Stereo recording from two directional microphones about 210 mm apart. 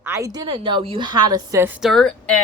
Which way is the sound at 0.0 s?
15° right (ahead or behind).